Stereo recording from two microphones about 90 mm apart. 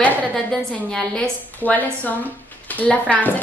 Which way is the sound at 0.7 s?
10° left (ahead or behind).